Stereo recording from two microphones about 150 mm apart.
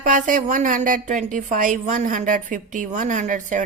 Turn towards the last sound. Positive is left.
turn(degrees=-55)  # may be behind; listen again after turning